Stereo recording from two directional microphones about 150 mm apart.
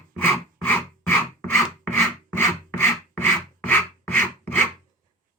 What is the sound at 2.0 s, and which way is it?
Rub, 10° left (ahead or behind).